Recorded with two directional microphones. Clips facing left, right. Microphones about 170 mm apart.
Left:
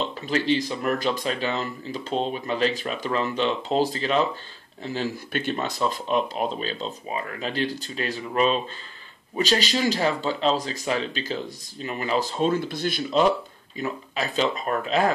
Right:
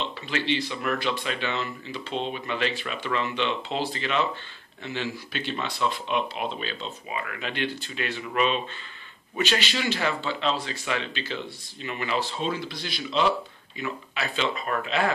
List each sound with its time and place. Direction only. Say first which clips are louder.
0.0 s speech: left 4 dB; 40° left (ahead or behind)